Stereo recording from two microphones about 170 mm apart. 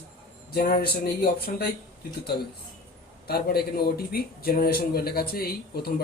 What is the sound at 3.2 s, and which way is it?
A man's voice, 65° left (ahead or behind).